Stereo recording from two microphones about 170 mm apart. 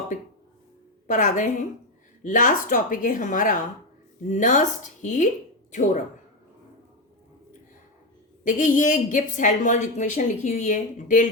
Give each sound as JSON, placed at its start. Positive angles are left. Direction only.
{"t": 0.1, "sound": "a woman's voice", "side_deg": 45}
{"t": 8.4, "sound": "a woman's voice", "side_deg": 50}